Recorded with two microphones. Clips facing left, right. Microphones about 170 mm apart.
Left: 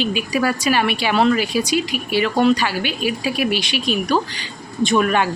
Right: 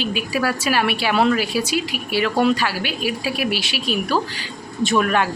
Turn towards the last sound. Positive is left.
turn(degrees=0)  # may be behind; listen again after turning